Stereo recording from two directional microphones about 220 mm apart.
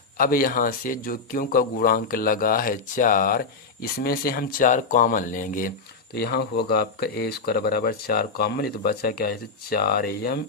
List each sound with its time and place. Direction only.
0.2 s speech: 40° left (ahead or behind)